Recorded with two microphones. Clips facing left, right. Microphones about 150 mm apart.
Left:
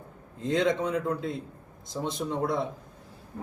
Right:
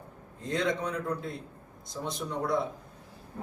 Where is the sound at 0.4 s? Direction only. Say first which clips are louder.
Left 4 dB; 20° left (ahead or behind).